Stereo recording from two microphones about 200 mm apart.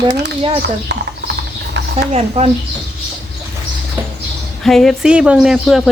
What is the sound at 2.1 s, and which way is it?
Speech, 30° right (ahead or behind).